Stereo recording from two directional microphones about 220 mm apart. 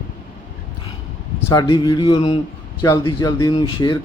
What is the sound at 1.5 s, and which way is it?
Speech, 20° left (ahead or behind).